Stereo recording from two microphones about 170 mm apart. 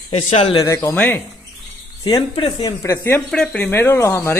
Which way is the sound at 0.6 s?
15° left (ahead or behind).